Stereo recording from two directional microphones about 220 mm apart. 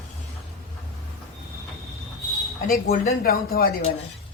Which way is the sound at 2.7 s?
40° left (ahead or behind).